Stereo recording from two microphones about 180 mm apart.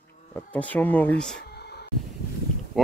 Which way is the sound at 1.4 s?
65° left (ahead or behind).